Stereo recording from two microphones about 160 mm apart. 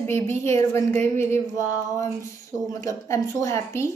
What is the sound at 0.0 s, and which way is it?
A woman's voice, 15° left (ahead or behind).